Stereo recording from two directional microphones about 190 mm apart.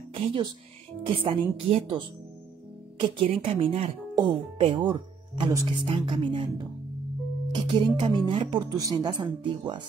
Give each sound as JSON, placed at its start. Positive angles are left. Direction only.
{"t": 0.1, "sound": "speech", "side_deg": -30}